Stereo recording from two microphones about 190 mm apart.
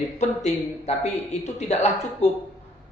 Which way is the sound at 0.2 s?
35° left (ahead or behind).